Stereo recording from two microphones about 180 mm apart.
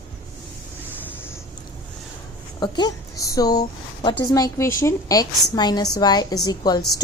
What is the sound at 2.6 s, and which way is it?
A woman's voice, 25° left (ahead or behind).